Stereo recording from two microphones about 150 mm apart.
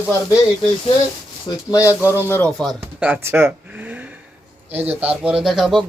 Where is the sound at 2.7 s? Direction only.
15° right (ahead or behind).